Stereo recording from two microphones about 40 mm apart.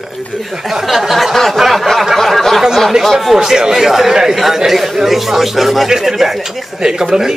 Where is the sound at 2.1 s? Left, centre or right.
Centre.